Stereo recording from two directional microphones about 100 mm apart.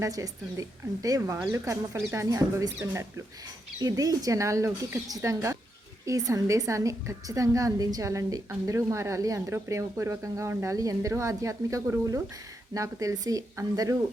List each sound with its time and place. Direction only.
0.0 s a woman's voice: 35° right (ahead or behind)
3.8 s a woman's voice: 40° right (ahead or behind)